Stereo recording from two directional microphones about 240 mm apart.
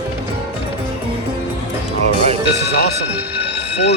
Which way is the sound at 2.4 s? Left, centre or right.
Left.